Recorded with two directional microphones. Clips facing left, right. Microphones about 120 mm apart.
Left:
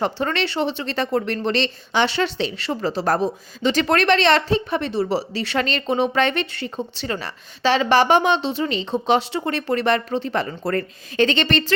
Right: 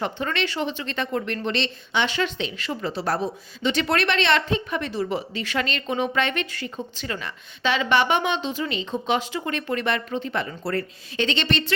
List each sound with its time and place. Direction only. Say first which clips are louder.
0.0 s speech: left 4 dB; 35° left (ahead or behind)